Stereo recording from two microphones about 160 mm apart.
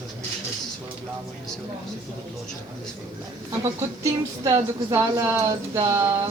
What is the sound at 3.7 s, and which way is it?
Speech, 20° right (ahead or behind).